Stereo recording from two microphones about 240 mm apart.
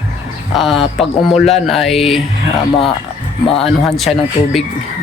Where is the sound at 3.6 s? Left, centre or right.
Centre.